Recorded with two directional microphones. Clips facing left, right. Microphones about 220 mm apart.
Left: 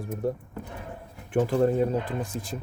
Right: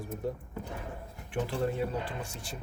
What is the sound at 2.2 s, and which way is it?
Speech, 90° left.